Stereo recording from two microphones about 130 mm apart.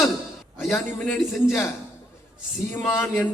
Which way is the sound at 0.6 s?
5° left (ahead or behind).